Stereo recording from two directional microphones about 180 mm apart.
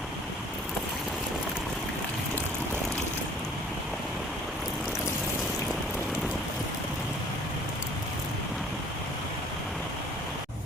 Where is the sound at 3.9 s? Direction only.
Centre (ahead or behind).